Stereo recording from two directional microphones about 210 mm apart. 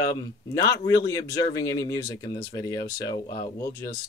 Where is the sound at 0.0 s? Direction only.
15° left (ahead or behind).